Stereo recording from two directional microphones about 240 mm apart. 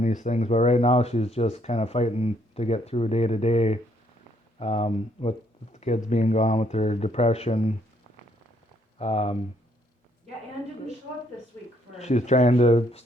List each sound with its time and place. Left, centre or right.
0.0 s speech: left
9.0 s speech: left
11.5 s a sound: centre
11.9 s speech: left